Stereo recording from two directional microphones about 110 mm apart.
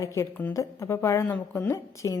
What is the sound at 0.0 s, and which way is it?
A woman's voice, 30° left (ahead or behind).